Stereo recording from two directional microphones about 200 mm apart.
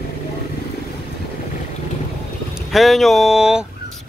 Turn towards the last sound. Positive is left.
turn(degrees=-5)  # may be behind; listen again after turning